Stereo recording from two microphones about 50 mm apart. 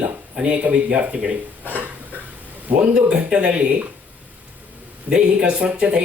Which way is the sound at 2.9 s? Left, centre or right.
Right.